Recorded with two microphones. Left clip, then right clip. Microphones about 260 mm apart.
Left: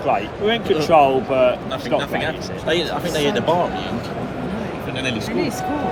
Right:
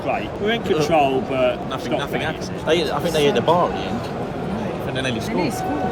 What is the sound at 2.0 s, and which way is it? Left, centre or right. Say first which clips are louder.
Speech: left 2 dB; centre.